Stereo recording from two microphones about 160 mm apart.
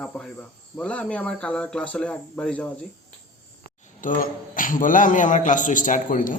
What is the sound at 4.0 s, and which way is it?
A man's voice, 55° left (ahead or behind).